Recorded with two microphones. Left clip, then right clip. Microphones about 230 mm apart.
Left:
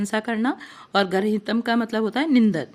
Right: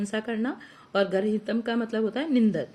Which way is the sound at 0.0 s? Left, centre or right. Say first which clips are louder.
Left 6 dB; left.